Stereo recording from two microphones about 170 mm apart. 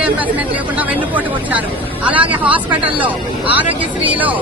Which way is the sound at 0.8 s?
10° right (ahead or behind).